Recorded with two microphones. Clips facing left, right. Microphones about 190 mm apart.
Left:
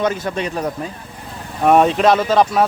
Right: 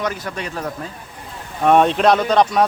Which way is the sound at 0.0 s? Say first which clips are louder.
Left 5 dB; 25° left (ahead or behind).